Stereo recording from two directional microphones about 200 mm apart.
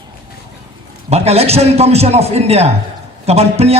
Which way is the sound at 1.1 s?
30° right (ahead or behind).